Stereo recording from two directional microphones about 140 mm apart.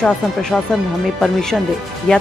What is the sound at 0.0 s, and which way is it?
Speech, 5° left (ahead or behind).